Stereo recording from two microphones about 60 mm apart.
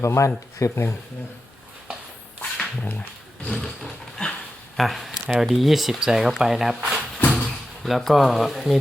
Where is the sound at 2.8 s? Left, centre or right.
Left.